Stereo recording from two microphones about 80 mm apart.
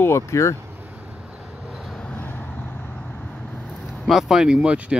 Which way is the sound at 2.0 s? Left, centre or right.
Centre.